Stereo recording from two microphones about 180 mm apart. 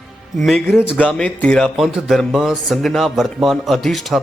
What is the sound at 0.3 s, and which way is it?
Speech, centre (ahead or behind).